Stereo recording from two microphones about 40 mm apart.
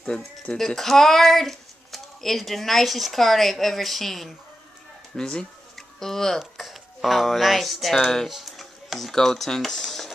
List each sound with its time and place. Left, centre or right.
0.6 s speech: centre
5.1 s speech: centre
5.8 s a sound: centre
6.6 s speech: centre
8.3 s a sound: centre
9.1 s speech: centre